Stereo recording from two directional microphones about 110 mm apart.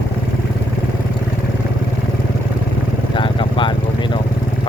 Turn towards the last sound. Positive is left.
turn(degrees=50)  # may be behind; listen again after turning